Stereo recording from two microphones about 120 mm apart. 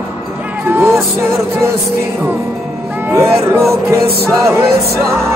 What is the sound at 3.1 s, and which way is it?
Music, 20° right (ahead or behind).